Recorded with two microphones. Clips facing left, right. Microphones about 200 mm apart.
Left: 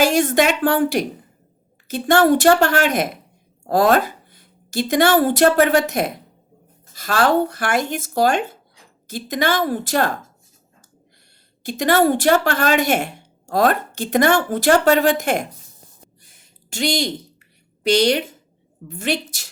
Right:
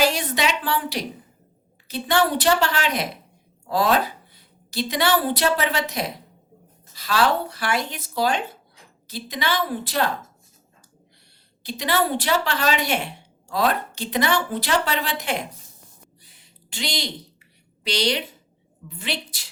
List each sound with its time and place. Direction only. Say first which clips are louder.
0.0 s a woman's voice: left 6 dB; 50° left (ahead or behind)
11.6 s a woman's voice: left 7 dB; 50° left (ahead or behind)
16.2 s a sound: even; 45° left (ahead or behind)
18.9 s a woman's voice: left 8 dB; 45° left (ahead or behind)